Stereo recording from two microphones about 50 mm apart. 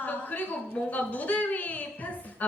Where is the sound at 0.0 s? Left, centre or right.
Left.